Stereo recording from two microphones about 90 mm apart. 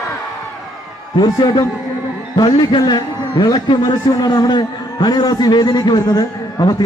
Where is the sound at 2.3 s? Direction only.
55° left (ahead or behind).